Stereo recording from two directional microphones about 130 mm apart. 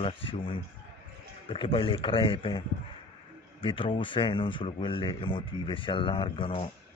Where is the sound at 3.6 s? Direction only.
40° left (ahead or behind).